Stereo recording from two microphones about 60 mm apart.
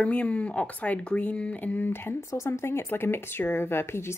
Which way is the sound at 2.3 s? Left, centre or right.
Left.